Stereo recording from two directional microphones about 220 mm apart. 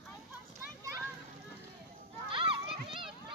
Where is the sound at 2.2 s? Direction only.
25° right (ahead or behind).